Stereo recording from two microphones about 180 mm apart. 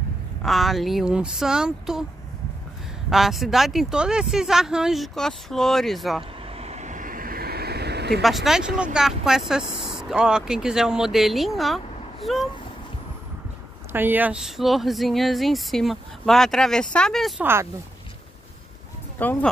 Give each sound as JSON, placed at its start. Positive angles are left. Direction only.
{"t": 0.4, "sound": "a woman's voice", "side_deg": 0}
{"t": 3.1, "sound": "a woman's voice", "side_deg": 0}
{"t": 6.4, "sound": "vehicle", "side_deg": -35}
{"t": 8.2, "sound": "a woman's voice", "side_deg": 0}
{"t": 13.9, "sound": "a woman's voice", "side_deg": -10}
{"t": 17.4, "sound": "speech", "side_deg": -15}
{"t": 19.1, "sound": "speech", "side_deg": 10}